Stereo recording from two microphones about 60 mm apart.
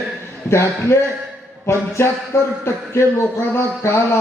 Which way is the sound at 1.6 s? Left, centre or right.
Left.